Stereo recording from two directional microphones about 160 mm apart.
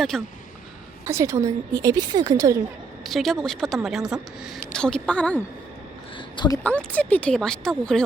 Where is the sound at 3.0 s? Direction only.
Centre (ahead or behind).